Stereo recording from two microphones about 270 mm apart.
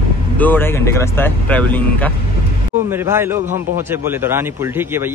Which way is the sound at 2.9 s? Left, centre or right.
Centre.